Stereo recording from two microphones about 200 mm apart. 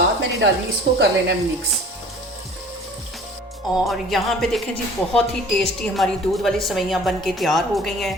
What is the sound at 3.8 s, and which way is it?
A woman's voice, centre (ahead or behind).